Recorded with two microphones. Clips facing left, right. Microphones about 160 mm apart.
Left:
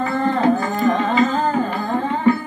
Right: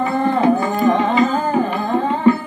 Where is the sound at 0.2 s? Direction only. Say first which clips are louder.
Right 2 dB; 20° right (ahead or behind).